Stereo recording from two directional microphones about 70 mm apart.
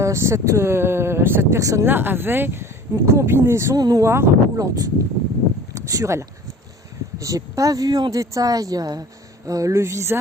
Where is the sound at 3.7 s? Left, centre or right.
Right.